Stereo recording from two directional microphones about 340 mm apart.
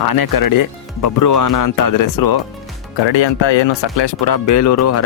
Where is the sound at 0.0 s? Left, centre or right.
Left.